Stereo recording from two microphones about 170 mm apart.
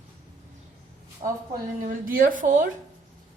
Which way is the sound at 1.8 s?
55° right (ahead or behind).